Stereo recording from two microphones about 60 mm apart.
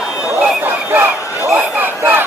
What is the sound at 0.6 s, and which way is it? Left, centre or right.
Crowd, right.